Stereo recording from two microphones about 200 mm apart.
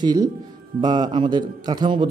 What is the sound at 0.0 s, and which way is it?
A man's voice, 20° right (ahead or behind).